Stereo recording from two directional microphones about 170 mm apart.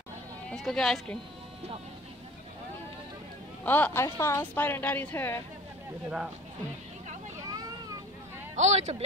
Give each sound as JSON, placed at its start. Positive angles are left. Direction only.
{"t": 0.5, "sound": "speech", "side_deg": 5}
{"t": 3.6, "sound": "a woman's voice", "side_deg": 10}
{"t": 6.0, "sound": "speech", "side_deg": -5}
{"t": 8.5, "sound": "speech", "side_deg": -40}